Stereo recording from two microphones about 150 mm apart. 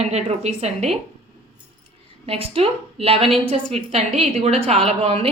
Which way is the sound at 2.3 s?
40° right (ahead or behind).